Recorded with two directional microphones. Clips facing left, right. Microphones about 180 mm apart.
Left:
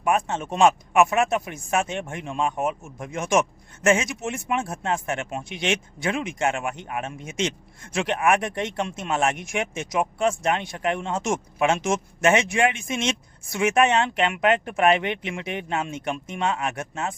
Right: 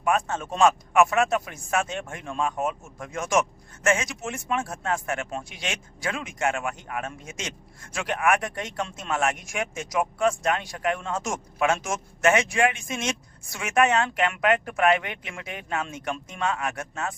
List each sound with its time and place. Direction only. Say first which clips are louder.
0.0 s speech: left 2 dB; 20° left (ahead or behind)